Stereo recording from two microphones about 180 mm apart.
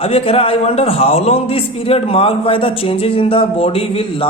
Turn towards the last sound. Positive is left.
turn(degrees=30)  # may be behind; listen again after turning